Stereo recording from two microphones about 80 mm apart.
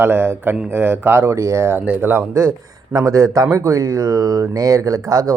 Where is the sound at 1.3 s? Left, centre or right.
Right.